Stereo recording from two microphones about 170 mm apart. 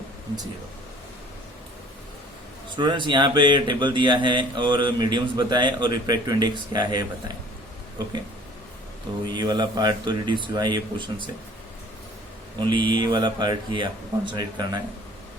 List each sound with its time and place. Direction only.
2.6 s speech: 30° right (ahead or behind)
9.3 s speech: 25° right (ahead or behind)
12.5 s speech: 30° right (ahead or behind)